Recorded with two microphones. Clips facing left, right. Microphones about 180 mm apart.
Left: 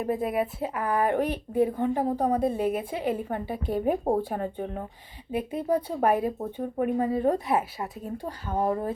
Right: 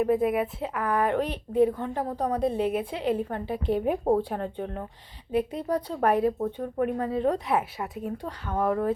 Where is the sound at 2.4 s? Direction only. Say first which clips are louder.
Even; 50° left (ahead or behind).